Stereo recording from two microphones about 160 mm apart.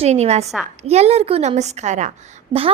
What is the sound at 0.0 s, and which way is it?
A woman's voice, 40° right (ahead or behind).